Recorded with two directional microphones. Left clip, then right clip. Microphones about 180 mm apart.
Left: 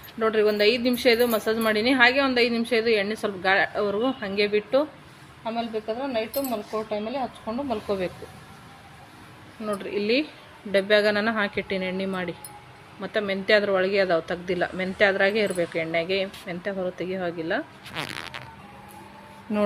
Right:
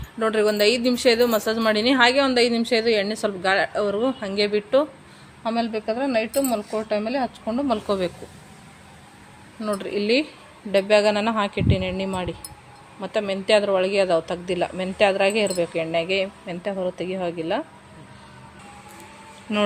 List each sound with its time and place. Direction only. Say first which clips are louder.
0.2 s a woman's voice: right 1 dB; 15° right (ahead or behind)
5.5 s speech: right 4 dB; 40° right (ahead or behind)
6.5 s speech: right 4 dB; 50° right (ahead or behind); by 8.1 s 30° right (ahead or behind)
9.6 s a woman's voice: right 3 dB; 15° right (ahead or behind)
19.5 s speech: right 3 dB; centre (ahead or behind)